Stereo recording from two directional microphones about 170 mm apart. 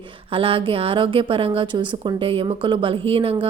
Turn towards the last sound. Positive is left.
turn(degrees=-30)  # may be behind; listen again after turning